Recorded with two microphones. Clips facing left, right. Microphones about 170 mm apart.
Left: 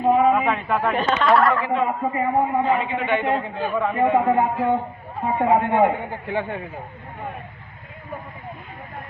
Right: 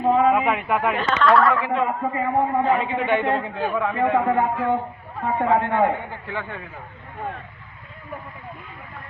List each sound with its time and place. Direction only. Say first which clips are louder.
0.1 s a sound: left 1 dB; 10° left (ahead or behind)
0.3 s a man's voice: even; 10° right (ahead or behind)
0.9 s a man's voice: even; 15° left (ahead or behind)
3.1 s a man's voice: right 1 dB; 15° left (ahead or behind)
3.6 s a man's voice: even; centre (ahead or behind)
3.9 s a man's voice: left 3 dB; 15° left (ahead or behind)